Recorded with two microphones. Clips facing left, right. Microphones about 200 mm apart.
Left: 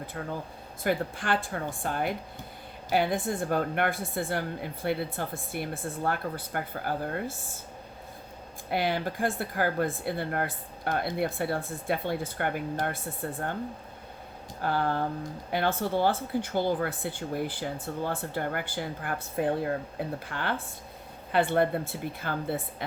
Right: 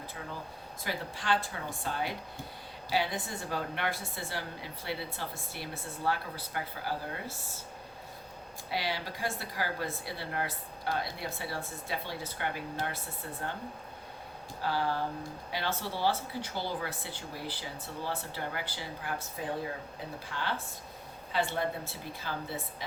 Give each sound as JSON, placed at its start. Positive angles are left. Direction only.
{"t": 0.9, "sound": "a woman's voice", "side_deg": 55}
{"t": 8.7, "sound": "a woman's voice", "side_deg": 50}
{"t": 14.6, "sound": "a woman's voice", "side_deg": 55}